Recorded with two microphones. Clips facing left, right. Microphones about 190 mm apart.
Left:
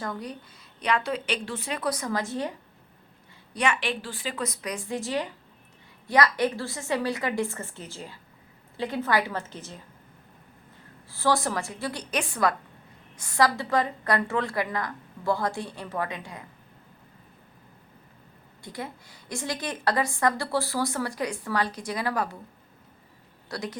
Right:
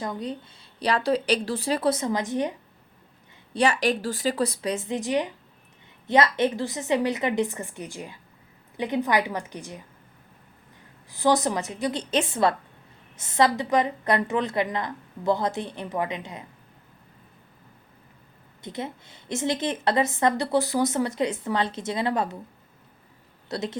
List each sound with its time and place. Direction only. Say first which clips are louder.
0.0 s a woman's voice: right 3 dB; 20° right (ahead or behind)
3.5 s a woman's voice: right 5 dB; 35° right (ahead or behind); by 9.8 s 15° right (ahead or behind)
11.1 s a woman's voice: right 3 dB; 20° right (ahead or behind)
18.6 s a woman's voice: right 4 dB; 20° right (ahead or behind)
23.5 s speech: right 4 dB; 25° right (ahead or behind)